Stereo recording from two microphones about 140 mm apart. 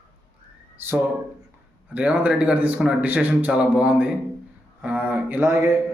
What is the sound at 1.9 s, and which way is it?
Speech, 10° right (ahead or behind).